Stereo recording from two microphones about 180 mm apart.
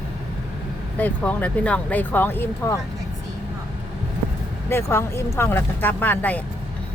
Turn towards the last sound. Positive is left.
turn(degrees=10)  # may be behind; listen again after turning